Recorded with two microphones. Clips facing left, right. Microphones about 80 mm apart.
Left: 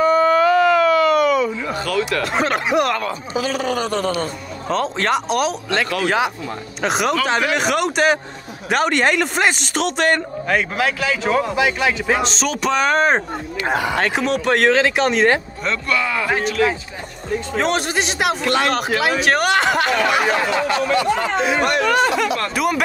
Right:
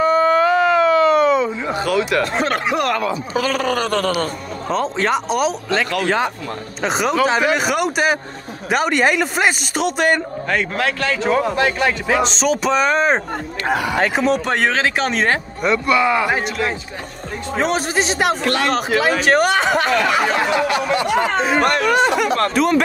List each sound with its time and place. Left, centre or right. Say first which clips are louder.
0.0 s a sound: even; right
2.2 s speech: even; centre
2.9 s speech: right 2 dB; right
4.6 s speech: right 1 dB; centre
10.5 s speech: left 1 dB; centre
13.7 s speech: right 1 dB; left
13.9 s speech: right 2 dB; centre
15.6 s speech: right 5 dB; centre
20.7 s speech: even; right
21.5 s speech: right 2 dB; right
21.9 s speech: right 1 dB; right
22.5 s speech: right 3 dB; centre